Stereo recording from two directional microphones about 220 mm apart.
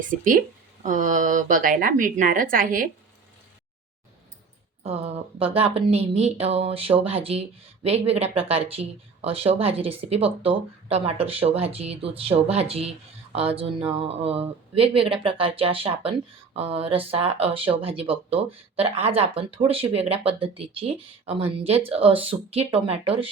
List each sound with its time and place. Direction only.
0.0 s speech: 35° right (ahead or behind)
4.8 s speech: 30° right (ahead or behind)